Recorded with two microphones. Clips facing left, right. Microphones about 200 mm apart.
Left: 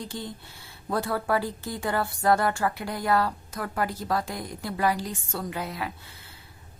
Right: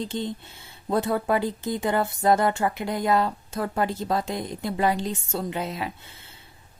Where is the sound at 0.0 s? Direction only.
20° right (ahead or behind).